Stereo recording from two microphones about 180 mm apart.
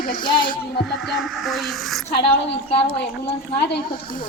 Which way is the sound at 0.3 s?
25° left (ahead or behind).